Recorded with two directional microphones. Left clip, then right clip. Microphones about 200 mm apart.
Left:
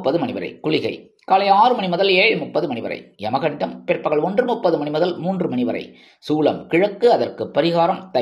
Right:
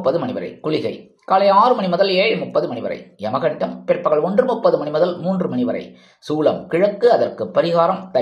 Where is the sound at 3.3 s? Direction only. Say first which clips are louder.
Right 1 dB; 25° left (ahead or behind).